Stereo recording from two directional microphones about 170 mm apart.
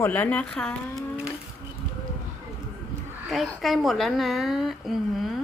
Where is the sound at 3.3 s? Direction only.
Centre (ahead or behind).